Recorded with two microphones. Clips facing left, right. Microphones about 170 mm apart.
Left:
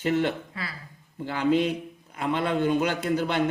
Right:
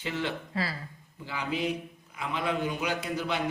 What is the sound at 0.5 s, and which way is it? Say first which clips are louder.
Speech: right 5 dB; 30° right (ahead or behind).